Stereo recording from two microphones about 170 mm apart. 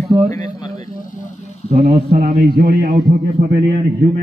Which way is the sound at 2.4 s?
65° right (ahead or behind).